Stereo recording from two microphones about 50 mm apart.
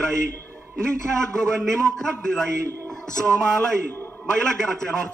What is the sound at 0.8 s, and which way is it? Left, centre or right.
A man's voice, centre.